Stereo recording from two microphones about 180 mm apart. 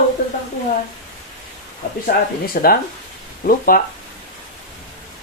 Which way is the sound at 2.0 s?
55° left (ahead or behind).